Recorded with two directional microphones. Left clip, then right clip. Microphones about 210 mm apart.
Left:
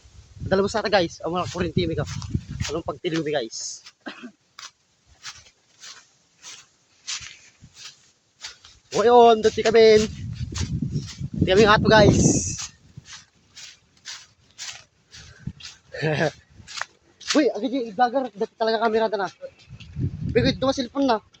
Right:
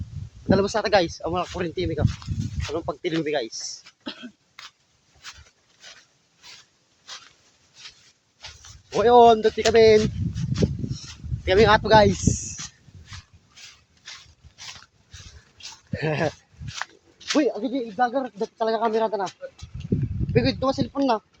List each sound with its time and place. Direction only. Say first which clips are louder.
0.5 s speech: even; 5° right (ahead or behind); by 2.7 s 10° left (ahead or behind)
2.7 s speech: even; centre (ahead or behind)
5.8 s a sound: left 3 dB; 15° left (ahead or behind)
9.0 s speech: even; centre (ahead or behind)
11.4 s speech: left 1 dB; 5° left (ahead or behind)
14.0 s rub: left 3 dB; 15° left (ahead or behind)
15.5 s speech: even; 15° left (ahead or behind)
20.3 s speech: left 1 dB; 10° left (ahead or behind)